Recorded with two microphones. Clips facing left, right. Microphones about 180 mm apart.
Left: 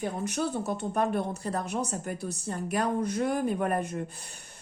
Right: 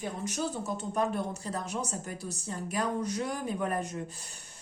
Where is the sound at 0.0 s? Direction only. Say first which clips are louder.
Left 3 dB; 60° left (ahead or behind).